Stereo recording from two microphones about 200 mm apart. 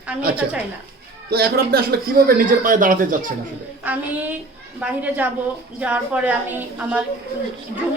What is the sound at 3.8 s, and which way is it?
Speech, 10° right (ahead or behind).